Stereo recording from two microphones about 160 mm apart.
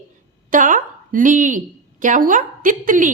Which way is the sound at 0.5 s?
55° right (ahead or behind).